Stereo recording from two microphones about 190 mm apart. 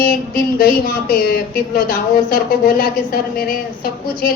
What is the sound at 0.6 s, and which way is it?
A woman's voice, 50° left (ahead or behind).